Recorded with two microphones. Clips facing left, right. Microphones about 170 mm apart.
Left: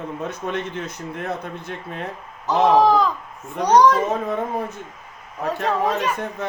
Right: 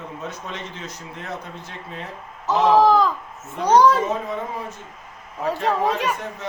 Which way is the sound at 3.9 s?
55° left (ahead or behind).